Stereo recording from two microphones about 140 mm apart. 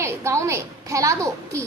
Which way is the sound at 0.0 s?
20° right (ahead or behind).